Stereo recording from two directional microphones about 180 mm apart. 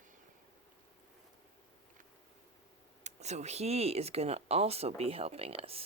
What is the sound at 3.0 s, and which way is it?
Speech, 40° right (ahead or behind).